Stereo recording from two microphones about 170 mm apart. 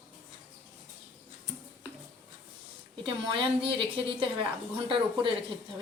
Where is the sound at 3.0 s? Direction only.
30° right (ahead or behind).